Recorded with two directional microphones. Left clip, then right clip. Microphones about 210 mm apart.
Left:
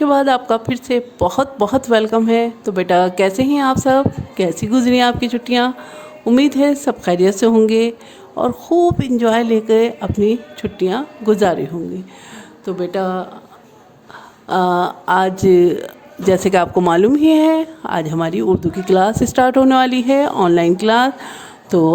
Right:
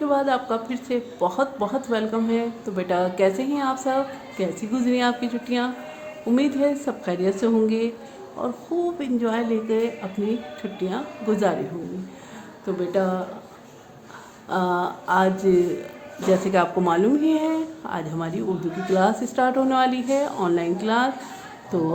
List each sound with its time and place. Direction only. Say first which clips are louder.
0.0 s a woman's voice: left 8 dB; 50° left (ahead or behind)
12.6 s a woman's voice: left 4 dB; 50° left (ahead or behind)
14.4 s a woman's voice: left 8 dB; 50° left (ahead or behind)